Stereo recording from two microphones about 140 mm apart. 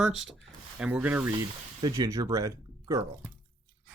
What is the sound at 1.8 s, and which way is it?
Speech, 25° right (ahead or behind).